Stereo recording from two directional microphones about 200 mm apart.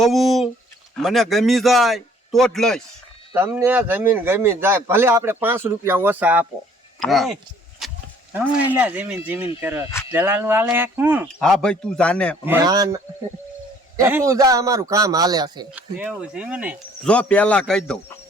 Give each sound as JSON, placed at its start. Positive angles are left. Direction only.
{"t": 0.0, "sound": "a man's voice", "side_deg": 0}
{"t": 3.3, "sound": "a man's voice", "side_deg": -10}
{"t": 7.8, "sound": "a sound", "side_deg": 0}
{"t": 8.3, "sound": "speech", "side_deg": -10}
{"t": 11.4, "sound": "a man's voice", "side_deg": 5}
{"t": 12.5, "sound": "speech", "side_deg": -15}
{"t": 15.7, "sound": "a man's voice", "side_deg": -5}
{"t": 17.1, "sound": "a man's voice", "side_deg": 5}